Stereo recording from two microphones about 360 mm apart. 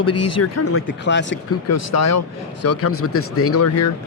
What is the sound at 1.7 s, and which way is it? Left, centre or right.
Speech, left.